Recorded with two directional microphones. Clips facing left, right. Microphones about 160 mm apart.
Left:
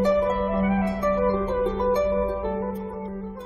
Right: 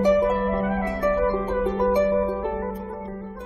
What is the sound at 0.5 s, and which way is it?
Music, centre (ahead or behind).